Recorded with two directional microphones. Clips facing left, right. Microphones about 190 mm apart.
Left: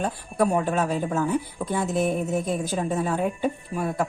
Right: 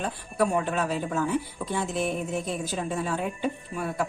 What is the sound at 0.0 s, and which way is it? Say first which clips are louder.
Speech: left 3 dB; 40° left (ahead or behind).